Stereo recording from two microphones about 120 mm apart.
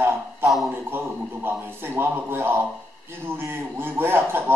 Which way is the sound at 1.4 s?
15° right (ahead or behind).